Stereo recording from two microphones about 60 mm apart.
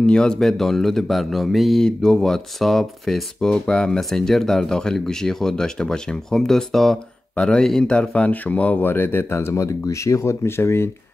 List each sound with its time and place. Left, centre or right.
0.0 s speech: centre
1.9 s speech: centre; by 10.9 s left